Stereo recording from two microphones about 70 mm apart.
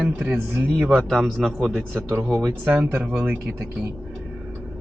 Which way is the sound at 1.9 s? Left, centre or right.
Right.